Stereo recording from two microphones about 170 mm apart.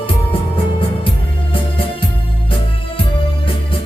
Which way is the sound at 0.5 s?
30° left (ahead or behind).